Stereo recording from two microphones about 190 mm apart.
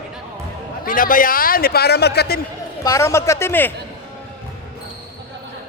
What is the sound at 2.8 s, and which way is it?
Speech, 15° left (ahead or behind).